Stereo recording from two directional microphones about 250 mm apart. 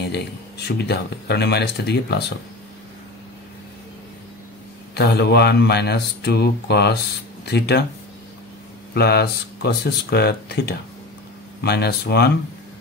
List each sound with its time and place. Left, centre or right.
0.7 s speech: left
4.9 s speech: left
8.9 s speech: left